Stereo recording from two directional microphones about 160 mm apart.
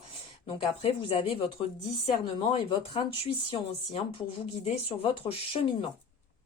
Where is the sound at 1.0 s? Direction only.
35° left (ahead or behind).